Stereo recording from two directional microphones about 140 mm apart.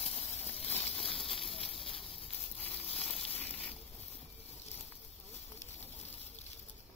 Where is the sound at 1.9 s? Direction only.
40° left (ahead or behind).